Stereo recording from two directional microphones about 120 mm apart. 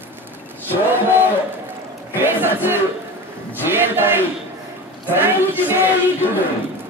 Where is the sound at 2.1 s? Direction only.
15° right (ahead or behind).